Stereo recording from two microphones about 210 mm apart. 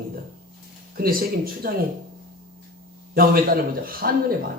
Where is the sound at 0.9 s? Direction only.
45° right (ahead or behind).